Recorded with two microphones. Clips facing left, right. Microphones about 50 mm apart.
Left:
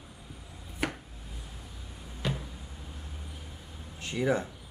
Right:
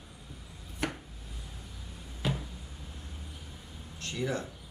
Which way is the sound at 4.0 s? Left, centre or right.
Centre.